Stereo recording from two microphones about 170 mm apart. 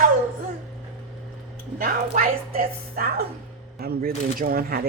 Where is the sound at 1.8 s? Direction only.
55° right (ahead or behind).